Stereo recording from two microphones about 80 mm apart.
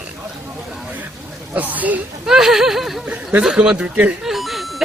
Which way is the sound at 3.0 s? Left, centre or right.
Centre.